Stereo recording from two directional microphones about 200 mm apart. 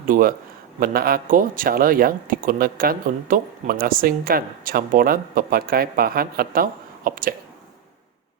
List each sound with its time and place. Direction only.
0.0 s speech: 45° right (ahead or behind)